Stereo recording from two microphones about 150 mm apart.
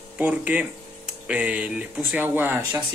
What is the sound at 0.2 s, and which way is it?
Speech, 10° right (ahead or behind).